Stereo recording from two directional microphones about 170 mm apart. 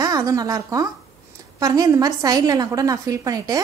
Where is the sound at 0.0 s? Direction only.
20° right (ahead or behind).